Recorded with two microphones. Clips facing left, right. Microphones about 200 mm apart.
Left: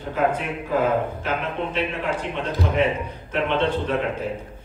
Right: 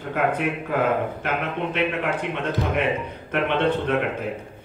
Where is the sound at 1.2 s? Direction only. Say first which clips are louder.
Even; 55° right (ahead or behind).